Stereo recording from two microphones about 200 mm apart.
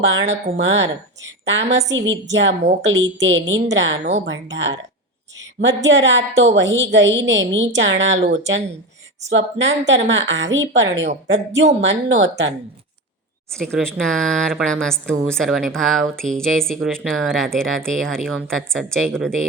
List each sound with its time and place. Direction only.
0.0 s a woman's voice: 70° right (ahead or behind)
13.6 s speech: 5° left (ahead or behind)